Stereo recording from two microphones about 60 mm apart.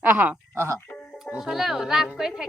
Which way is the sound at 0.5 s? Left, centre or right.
Right.